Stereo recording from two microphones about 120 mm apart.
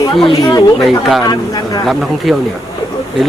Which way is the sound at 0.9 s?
Centre (ahead or behind).